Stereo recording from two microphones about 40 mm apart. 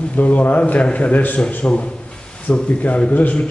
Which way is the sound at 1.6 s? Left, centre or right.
Left.